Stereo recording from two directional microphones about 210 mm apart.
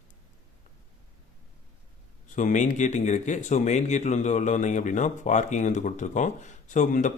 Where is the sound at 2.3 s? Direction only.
35° left (ahead or behind).